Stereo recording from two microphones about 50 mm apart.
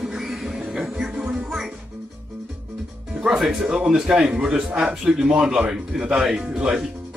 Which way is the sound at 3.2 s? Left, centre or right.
Centre.